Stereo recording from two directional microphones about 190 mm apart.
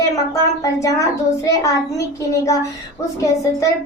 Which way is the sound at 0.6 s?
15° left (ahead or behind).